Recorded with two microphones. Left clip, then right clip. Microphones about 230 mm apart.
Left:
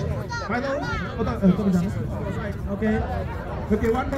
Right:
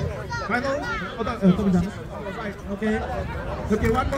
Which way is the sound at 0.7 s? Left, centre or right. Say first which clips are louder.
Right 1 dB; left.